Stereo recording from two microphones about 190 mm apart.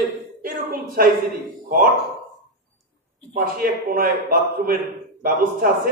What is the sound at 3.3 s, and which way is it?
A man's voice, 50° right (ahead or behind).